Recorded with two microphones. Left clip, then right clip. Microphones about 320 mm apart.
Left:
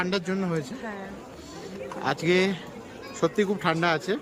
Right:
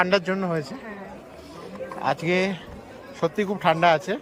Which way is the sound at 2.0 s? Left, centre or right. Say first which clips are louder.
Right 1 dB; centre.